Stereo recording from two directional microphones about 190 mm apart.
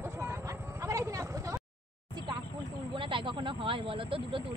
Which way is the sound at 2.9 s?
25° right (ahead or behind).